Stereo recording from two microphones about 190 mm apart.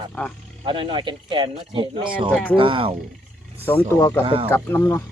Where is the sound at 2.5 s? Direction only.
25° right (ahead or behind).